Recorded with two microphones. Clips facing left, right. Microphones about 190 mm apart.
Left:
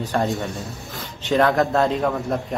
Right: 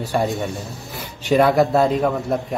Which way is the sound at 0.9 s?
10° right (ahead or behind).